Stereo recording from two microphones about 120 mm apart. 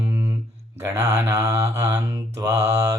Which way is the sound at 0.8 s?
25° right (ahead or behind).